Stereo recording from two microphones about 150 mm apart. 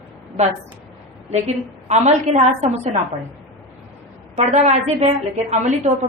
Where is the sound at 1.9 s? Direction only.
45° right (ahead or behind).